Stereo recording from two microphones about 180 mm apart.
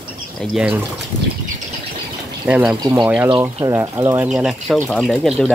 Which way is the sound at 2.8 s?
25° right (ahead or behind).